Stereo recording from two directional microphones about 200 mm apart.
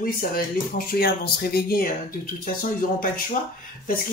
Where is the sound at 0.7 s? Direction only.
50° left (ahead or behind).